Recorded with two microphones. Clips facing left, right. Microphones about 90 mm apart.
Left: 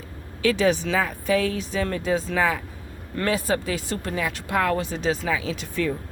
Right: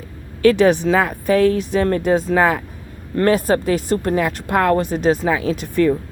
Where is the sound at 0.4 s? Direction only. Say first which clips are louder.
Right 8 dB; 55° right (ahead or behind).